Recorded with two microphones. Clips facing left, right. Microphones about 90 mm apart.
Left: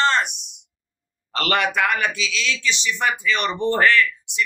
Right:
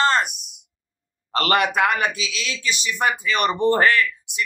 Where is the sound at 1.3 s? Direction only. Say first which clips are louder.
Right 2 dB; 40° right (ahead or behind).